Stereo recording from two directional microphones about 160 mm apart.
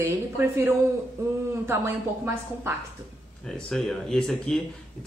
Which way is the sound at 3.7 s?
Centre (ahead or behind).